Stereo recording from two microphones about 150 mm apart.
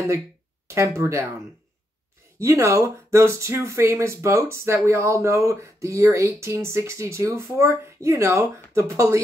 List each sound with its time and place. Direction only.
0.7 s speech: 20° right (ahead or behind)
2.3 s speech: 20° right (ahead or behind)